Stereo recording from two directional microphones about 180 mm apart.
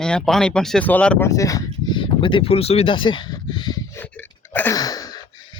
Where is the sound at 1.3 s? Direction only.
20° left (ahead or behind).